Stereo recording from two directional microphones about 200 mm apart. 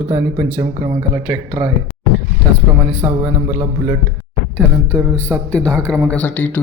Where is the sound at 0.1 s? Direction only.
25° right (ahead or behind).